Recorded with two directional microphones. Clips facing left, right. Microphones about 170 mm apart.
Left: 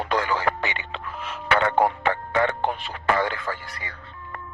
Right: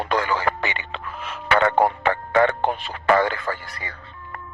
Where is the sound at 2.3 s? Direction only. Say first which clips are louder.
Right 7 dB; 55° right (ahead or behind).